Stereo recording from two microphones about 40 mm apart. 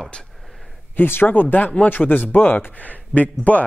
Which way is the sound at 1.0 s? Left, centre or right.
Left.